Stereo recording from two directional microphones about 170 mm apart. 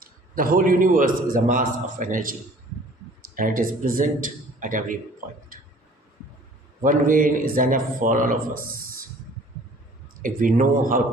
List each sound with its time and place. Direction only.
0.0 s a man's voice: 55° right (ahead or behind)
6.8 s a man's voice: 55° right (ahead or behind)
10.2 s a man's voice: 50° right (ahead or behind)